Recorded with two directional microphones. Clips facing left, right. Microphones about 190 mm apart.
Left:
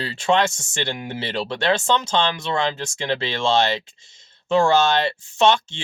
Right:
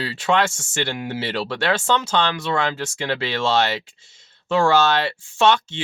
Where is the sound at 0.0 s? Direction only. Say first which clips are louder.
Left 1 dB; 25° left (ahead or behind).